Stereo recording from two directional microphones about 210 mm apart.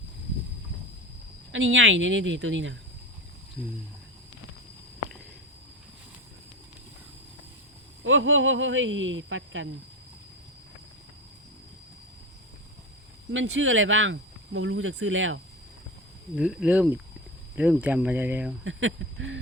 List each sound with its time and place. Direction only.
1.5 s speech: 65° right (ahead or behind)
8.0 s speech: 70° right (ahead or behind)
13.3 s speech: 65° right (ahead or behind)
16.3 s speech: 5° right (ahead or behind)
18.6 s speech: 65° right (ahead or behind)